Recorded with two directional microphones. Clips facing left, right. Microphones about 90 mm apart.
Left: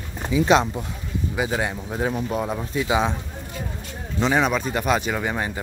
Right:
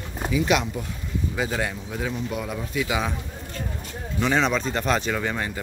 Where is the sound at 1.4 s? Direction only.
20° left (ahead or behind).